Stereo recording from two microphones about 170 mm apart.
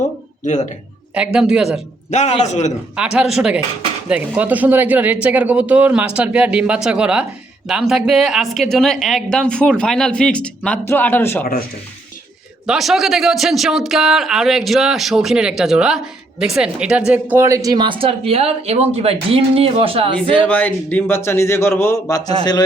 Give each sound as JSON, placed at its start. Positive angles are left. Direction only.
{"t": 0.4, "sound": "a man's voice", "side_deg": 45}
{"t": 1.1, "sound": "speech", "side_deg": -5}
{"t": 2.0, "sound": "a man's voice", "side_deg": 40}
{"t": 2.9, "sound": "speech", "side_deg": -5}
{"t": 12.6, "sound": "speech", "side_deg": 0}
{"t": 20.5, "sound": "speech", "side_deg": 10}